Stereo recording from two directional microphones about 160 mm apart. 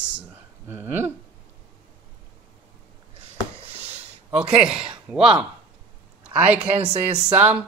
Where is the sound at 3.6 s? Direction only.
40° right (ahead or behind).